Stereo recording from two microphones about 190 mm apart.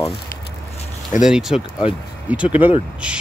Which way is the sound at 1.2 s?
Centre (ahead or behind).